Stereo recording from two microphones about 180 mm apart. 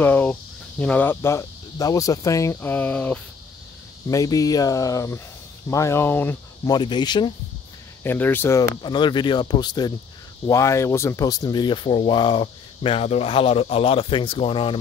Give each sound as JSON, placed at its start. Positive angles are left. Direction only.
{"t": 0.0, "sound": "speech", "side_deg": 10}
{"t": 4.1, "sound": "speech", "side_deg": 20}
{"t": 6.7, "sound": "speech", "side_deg": 25}
{"t": 8.0, "sound": "speech", "side_deg": 10}